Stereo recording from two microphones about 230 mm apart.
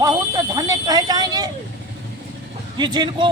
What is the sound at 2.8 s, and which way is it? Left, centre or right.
Speech, centre.